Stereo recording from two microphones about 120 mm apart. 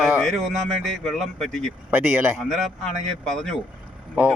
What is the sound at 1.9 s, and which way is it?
Speech, 15° right (ahead or behind).